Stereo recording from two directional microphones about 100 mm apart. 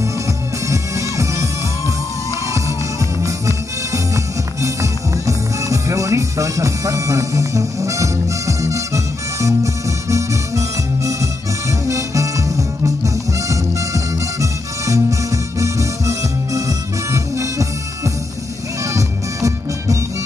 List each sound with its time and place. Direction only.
0.7 s music: 30° right (ahead or behind)
3.2 s music: 30° right (ahead or behind)
11.9 s music: 30° right (ahead or behind)